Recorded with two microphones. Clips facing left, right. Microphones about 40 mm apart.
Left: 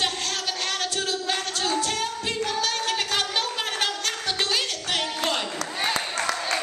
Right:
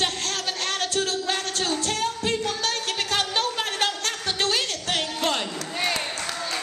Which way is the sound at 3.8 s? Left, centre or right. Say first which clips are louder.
Right 2 dB; right.